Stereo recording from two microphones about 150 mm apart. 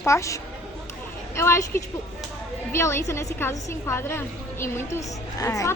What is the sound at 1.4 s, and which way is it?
A woman's voice, 15° left (ahead or behind).